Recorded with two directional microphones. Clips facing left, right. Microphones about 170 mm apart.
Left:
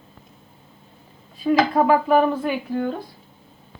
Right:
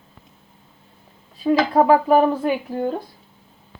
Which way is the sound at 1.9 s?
35° right (ahead or behind).